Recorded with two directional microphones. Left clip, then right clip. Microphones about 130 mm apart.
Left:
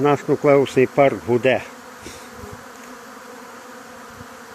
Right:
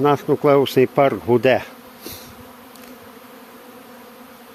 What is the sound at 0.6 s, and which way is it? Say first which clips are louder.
Speech: even; 40° right (ahead or behind).